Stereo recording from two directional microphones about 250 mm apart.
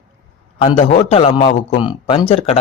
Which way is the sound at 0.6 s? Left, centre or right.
Left.